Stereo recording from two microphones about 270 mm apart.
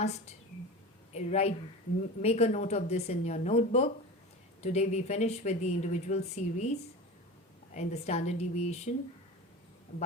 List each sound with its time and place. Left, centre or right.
0.0 s a woman's voice: left